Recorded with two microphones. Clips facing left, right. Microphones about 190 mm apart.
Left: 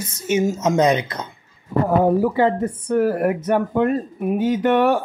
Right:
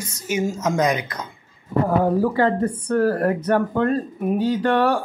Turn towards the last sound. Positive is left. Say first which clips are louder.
# left 2 dB
turn(degrees=20)  # may be behind; listen again after turning